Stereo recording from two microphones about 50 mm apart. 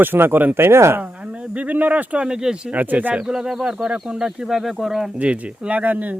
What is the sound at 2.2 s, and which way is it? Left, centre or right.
Speech, centre.